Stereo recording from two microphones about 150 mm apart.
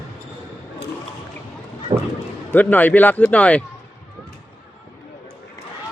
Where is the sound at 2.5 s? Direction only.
10° left (ahead or behind).